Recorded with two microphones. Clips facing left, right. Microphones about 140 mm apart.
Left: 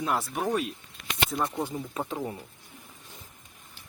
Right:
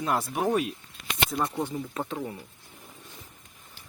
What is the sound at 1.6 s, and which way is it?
Speech, 10° left (ahead or behind).